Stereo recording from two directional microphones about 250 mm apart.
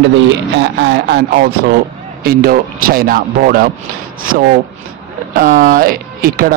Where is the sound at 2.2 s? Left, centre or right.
Right.